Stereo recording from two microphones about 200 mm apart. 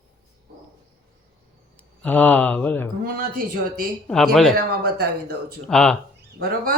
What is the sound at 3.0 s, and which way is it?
Speech, 45° right (ahead or behind).